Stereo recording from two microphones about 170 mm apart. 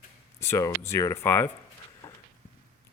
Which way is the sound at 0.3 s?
15° left (ahead or behind).